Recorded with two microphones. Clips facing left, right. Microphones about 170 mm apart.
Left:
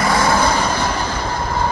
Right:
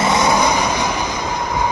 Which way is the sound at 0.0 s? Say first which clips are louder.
Right 1 dB; 20° right (ahead or behind).